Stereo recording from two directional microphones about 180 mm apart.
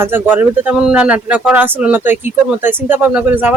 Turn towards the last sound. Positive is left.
turn(degrees=-10)  # may be behind; listen again after turning